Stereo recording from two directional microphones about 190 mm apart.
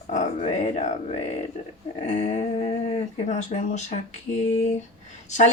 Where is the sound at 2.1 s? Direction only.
35° left (ahead or behind).